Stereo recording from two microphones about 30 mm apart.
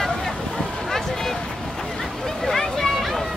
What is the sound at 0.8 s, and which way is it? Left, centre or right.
Boat, centre.